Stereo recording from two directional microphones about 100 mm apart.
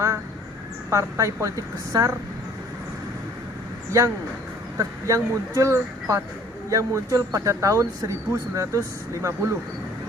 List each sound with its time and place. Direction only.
0.9 s speech: 30° right (ahead or behind)
3.9 s speech: 35° right (ahead or behind)